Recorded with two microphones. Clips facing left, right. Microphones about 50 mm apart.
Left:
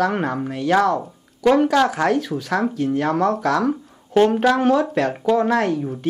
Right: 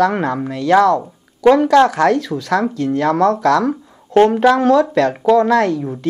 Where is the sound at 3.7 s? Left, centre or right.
Right.